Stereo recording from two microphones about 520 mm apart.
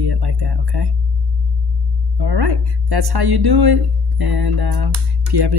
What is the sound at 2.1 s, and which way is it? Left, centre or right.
A woman's voice, right.